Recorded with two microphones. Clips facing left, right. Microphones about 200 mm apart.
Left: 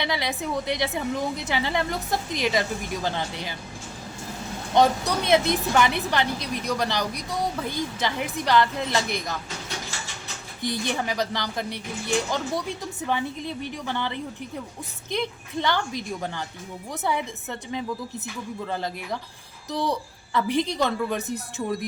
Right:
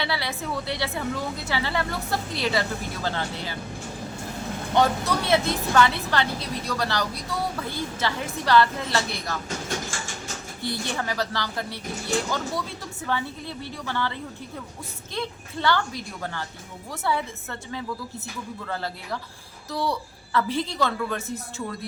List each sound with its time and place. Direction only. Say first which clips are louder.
0.0 s speech: left 2 dB; 15° left (ahead or behind)
4.7 s speech: left 2 dB; 15° left (ahead or behind)
9.6 s a sound: right 4 dB; 50° right (ahead or behind)
10.6 s speech: left 3 dB; 15° left (ahead or behind)